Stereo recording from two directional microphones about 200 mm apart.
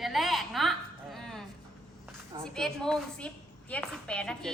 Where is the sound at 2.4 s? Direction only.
5° left (ahead or behind).